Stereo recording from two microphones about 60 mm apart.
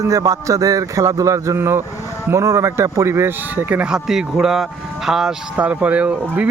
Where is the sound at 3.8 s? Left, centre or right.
Centre.